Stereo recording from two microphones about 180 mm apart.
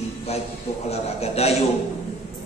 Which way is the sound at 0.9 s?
35° left (ahead or behind).